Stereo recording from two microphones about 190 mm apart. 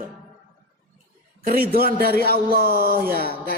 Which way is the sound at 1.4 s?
50° right (ahead or behind).